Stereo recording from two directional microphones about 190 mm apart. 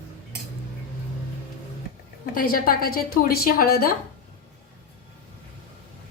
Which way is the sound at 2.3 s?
50° left (ahead or behind).